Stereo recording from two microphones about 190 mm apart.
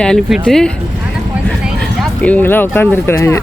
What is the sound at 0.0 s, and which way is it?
Speech, centre (ahead or behind).